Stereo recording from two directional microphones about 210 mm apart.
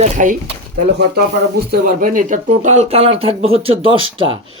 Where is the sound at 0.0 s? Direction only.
35° right (ahead or behind).